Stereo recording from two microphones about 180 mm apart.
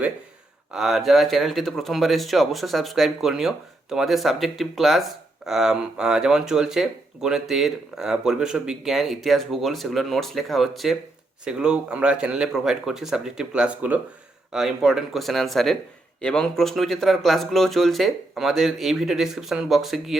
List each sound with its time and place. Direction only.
0.7 s speech: centre (ahead or behind)